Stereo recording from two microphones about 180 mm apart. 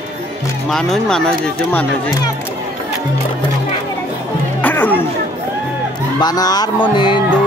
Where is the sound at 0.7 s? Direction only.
Centre (ahead or behind).